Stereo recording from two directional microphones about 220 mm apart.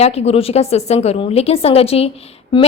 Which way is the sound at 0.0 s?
30° left (ahead or behind).